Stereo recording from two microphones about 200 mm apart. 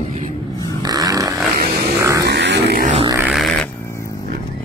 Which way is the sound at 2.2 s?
60° right (ahead or behind).